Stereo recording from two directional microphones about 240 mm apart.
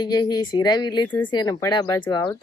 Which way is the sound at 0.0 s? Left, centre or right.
Centre.